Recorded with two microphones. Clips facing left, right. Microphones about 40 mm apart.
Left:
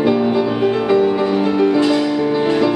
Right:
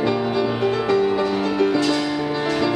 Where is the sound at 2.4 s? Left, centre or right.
Centre.